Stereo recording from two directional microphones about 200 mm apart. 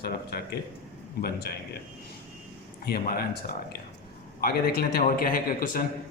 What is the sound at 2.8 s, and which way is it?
A man's voice, 50° left (ahead or behind).